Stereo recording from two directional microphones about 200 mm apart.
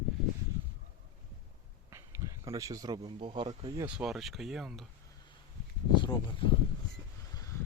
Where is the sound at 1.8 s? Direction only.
15° right (ahead or behind).